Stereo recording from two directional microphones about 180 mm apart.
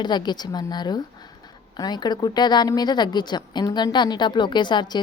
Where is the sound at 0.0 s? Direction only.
25° left (ahead or behind).